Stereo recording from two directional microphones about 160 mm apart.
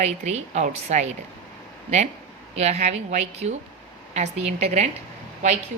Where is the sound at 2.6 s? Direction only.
45° right (ahead or behind).